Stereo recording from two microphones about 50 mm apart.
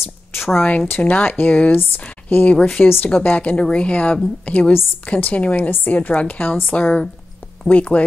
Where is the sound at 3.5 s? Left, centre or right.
Left.